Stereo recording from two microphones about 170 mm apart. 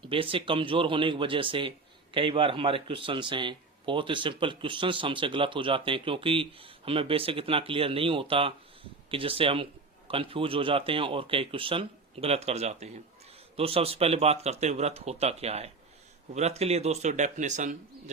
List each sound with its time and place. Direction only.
0.0 s a man's voice: 30° right (ahead or behind)